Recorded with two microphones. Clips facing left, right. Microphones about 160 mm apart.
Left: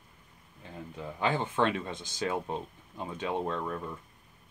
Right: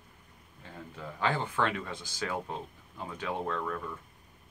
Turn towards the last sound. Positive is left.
turn(degrees=20)  # may be behind; listen again after turning